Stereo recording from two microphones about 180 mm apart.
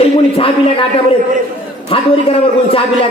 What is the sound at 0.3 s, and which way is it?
Speech, 30° left (ahead or behind).